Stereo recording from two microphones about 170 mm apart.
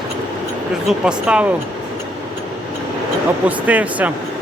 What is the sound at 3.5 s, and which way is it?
Speech, 10° right (ahead or behind).